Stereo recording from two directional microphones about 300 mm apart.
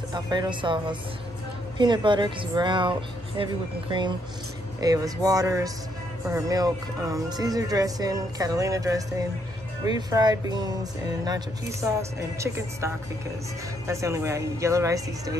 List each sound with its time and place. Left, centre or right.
0.1 s speech: centre
4.7 s speech: centre